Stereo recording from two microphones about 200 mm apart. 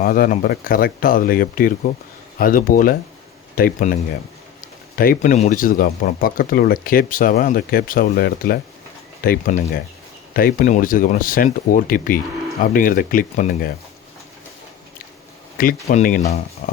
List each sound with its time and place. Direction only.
0.0 s speech: 45° left (ahead or behind)
4.9 s speech: 40° left (ahead or behind)
15.9 s speech: 40° left (ahead or behind)
16.6 s music: 40° left (ahead or behind)